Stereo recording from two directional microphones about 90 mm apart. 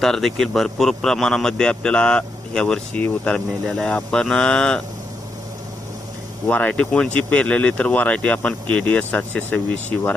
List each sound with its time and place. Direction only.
0.0 s a man's voice: 5° left (ahead or behind)
3.7 s a man's voice: 5° left (ahead or behind)
6.5 s a man's voice: 15° left (ahead or behind)